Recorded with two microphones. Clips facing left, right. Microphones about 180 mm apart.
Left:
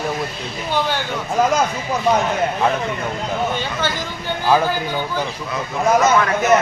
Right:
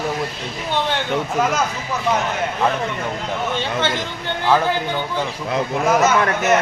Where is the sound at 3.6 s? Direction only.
25° right (ahead or behind).